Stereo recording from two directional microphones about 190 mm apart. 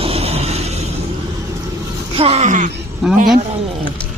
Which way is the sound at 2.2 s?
35° right (ahead or behind).